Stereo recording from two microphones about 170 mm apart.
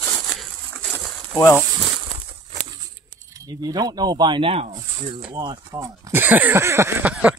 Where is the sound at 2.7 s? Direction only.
20° right (ahead or behind).